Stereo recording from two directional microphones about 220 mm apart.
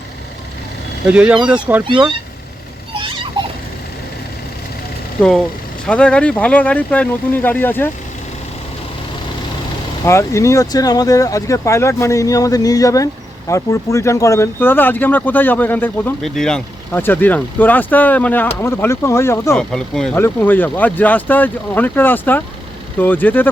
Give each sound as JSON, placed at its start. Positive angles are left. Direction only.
{"t": 1.0, "sound": "speech", "side_deg": -5}
{"t": 2.9, "sound": "a sound", "side_deg": -25}
{"t": 5.8, "sound": "speech", "side_deg": 5}
{"t": 10.0, "sound": "speech", "side_deg": 15}